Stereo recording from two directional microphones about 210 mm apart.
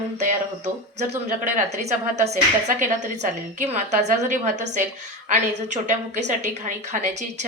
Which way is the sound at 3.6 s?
30° right (ahead or behind).